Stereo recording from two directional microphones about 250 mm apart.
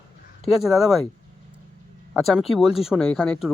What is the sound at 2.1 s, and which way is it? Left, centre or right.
Speech, centre.